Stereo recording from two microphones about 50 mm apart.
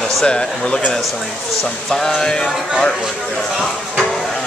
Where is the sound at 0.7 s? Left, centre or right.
Left.